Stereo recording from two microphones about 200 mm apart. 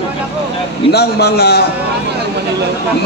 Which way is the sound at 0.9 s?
55° left (ahead or behind).